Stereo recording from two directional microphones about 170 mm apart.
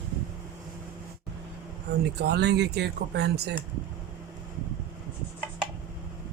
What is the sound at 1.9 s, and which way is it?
Speech, 75° right (ahead or behind).